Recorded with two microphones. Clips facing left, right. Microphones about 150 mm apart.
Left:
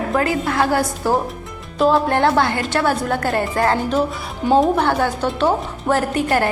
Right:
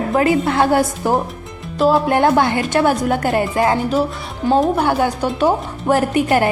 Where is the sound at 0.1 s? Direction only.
20° right (ahead or behind).